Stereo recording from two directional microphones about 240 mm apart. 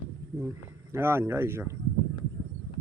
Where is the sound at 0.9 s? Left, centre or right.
Centre.